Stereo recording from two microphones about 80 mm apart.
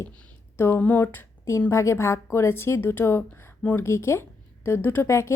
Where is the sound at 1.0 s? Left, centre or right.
Left.